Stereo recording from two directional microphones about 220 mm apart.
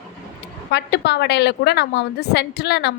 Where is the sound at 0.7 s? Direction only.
50° left (ahead or behind).